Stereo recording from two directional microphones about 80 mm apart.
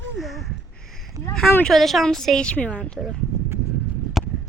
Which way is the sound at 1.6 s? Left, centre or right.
Centre.